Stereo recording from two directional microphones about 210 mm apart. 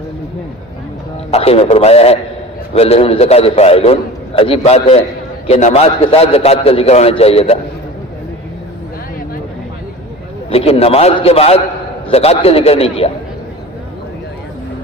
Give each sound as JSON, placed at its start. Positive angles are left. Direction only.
{"t": 1.3, "sound": "a man's voice", "side_deg": 30}
{"t": 10.5, "sound": "a man's voice", "side_deg": 30}